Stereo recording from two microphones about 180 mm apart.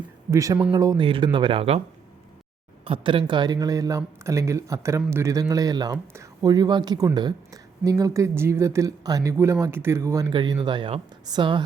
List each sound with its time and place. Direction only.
0.3 s speech: 20° right (ahead or behind)
2.8 s speech: 30° right (ahead or behind)